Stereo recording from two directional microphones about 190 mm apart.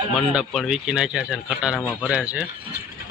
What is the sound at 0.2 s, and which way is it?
Speech, centre (ahead or behind).